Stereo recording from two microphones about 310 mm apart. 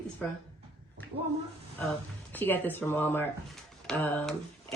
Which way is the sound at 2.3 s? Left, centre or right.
Centre.